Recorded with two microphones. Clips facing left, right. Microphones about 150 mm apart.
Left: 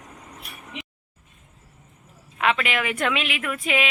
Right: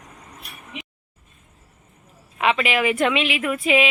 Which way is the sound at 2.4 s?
5° right (ahead or behind).